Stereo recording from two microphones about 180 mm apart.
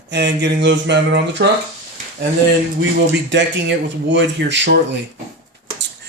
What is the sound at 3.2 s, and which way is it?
A man's voice, 80° right.